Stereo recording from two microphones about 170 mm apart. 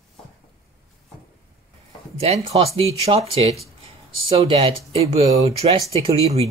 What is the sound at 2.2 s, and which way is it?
Speech, 35° right (ahead or behind).